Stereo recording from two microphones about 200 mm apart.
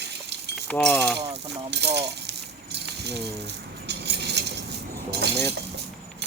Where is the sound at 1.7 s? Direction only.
60° right (ahead or behind).